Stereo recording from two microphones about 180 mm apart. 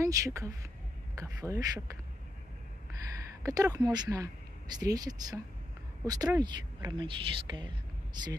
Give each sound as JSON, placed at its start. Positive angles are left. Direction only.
{"t": 0.0, "sound": "speech", "side_deg": -15}
{"t": 3.4, "sound": "speech", "side_deg": -20}